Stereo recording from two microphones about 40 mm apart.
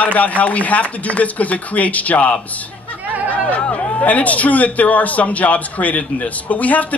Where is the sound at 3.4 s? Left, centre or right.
Left.